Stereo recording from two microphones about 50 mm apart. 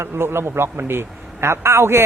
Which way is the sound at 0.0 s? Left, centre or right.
Right.